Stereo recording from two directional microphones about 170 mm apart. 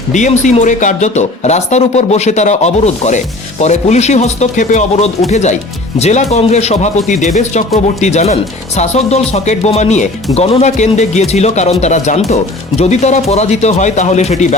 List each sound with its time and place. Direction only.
0.1 s speech: 45° left (ahead or behind)